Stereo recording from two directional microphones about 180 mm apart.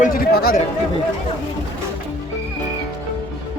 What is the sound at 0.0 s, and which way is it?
Speech, 55° left (ahead or behind).